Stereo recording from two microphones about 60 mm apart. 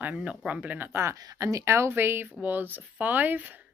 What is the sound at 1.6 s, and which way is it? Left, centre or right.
Speech, right.